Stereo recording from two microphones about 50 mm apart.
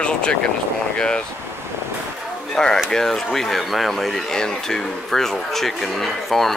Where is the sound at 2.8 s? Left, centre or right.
Centre.